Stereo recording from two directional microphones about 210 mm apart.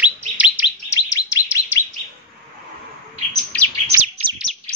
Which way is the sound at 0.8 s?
15° left (ahead or behind).